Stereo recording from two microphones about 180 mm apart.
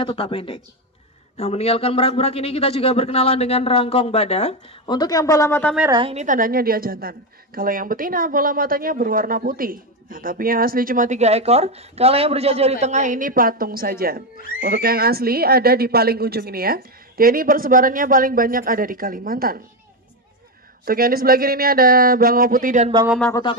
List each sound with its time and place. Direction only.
0.0 s a man's voice: 30° left (ahead or behind)
4.9 s speech: 20° left (ahead or behind)
5.9 s a woman's voice: 25° right (ahead or behind)
6.1 s a woman's voice: 45° right (ahead or behind)
20.8 s speech: 55° right (ahead or behind)